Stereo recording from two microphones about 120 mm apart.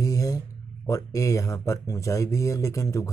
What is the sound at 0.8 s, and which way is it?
Speech, 25° left (ahead or behind).